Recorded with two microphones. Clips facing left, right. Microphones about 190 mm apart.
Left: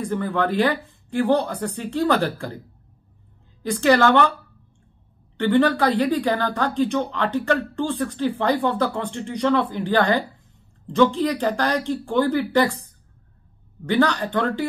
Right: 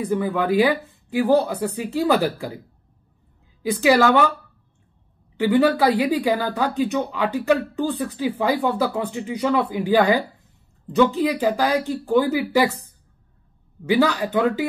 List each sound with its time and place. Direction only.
0.0 s speech: 5° right (ahead or behind)
3.6 s speech: 5° right (ahead or behind)
5.4 s speech: 5° right (ahead or behind)
13.8 s speech: 5° right (ahead or behind)